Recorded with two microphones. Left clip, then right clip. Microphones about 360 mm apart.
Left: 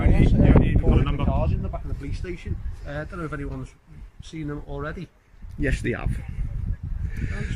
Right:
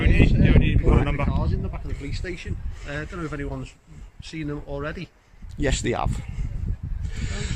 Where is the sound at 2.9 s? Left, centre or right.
Centre.